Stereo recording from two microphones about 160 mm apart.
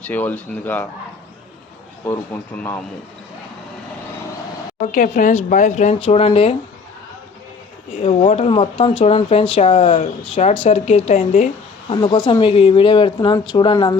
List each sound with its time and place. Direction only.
0.1 s speech: 10° left (ahead or behind)
2.0 s speech: 15° left (ahead or behind)
4.8 s speech: 55° left (ahead or behind); by 6.6 s 40° left (ahead or behind)
8.0 s speech: 35° left (ahead or behind); by 11.5 s 55° left (ahead or behind)
11.9 s speech: 25° left (ahead or behind)